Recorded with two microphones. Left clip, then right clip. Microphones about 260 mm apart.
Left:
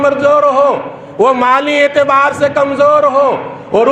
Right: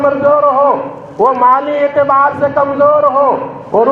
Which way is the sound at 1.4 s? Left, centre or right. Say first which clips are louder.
Even; left.